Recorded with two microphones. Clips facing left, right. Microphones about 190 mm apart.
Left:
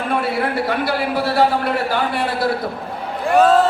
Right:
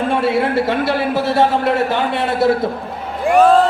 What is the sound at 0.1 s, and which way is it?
A man's voice, 25° right (ahead or behind).